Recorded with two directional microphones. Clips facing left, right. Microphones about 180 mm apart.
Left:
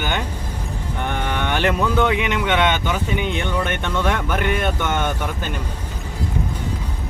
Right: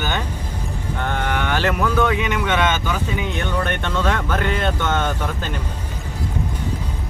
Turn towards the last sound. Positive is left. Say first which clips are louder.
# right 1 dB
turn(degrees=10)  # may be behind; listen again after turning